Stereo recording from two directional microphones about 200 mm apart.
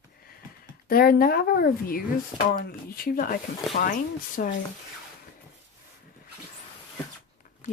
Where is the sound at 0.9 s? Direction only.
50° left (ahead or behind).